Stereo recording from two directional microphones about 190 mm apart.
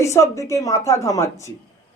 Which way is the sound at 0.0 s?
15° left (ahead or behind).